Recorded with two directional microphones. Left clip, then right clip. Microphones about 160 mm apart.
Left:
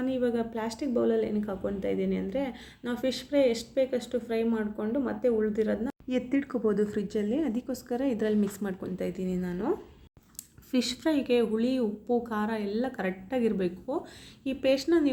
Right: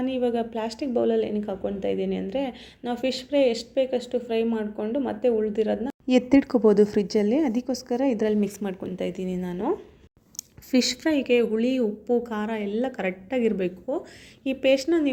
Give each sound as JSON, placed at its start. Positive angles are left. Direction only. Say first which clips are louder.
{"t": 0.0, "sound": "speech", "louder": "right 4 dB", "side_deg": -5}
{"t": 6.1, "sound": "speech", "louder": "right 11 dB", "side_deg": -30}